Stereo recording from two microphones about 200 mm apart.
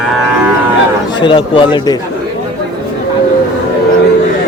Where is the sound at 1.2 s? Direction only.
25° left (ahead or behind).